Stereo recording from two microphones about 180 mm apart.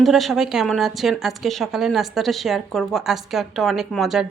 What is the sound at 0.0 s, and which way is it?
A woman's voice, centre (ahead or behind).